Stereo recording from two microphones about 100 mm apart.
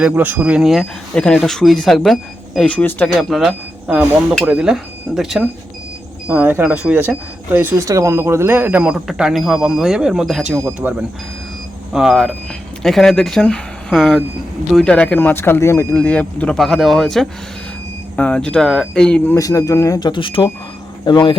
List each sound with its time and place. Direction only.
0.0 s speech: 15° right (ahead or behind)
1.1 s speech: 10° left (ahead or behind)
3.1 s speech: centre (ahead or behind)
6.2 s speech: 15° right (ahead or behind)
10.8 s speech: 15° right (ahead or behind)
11.9 s speech: 5° right (ahead or behind)
14.9 s speech: 10° left (ahead or behind); by 16.0 s 30° left (ahead or behind)
16.0 s speech: 15° left (ahead or behind)
16.6 s speech: centre (ahead or behind)
19.4 s speech: 35° left (ahead or behind)
20.0 s speech: 50° left (ahead or behind)